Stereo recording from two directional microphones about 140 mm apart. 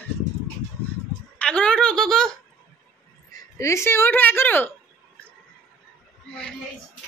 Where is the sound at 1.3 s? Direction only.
5° left (ahead or behind).